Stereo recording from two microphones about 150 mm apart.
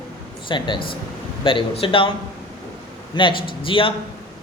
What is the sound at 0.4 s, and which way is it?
A man's voice, 30° left (ahead or behind).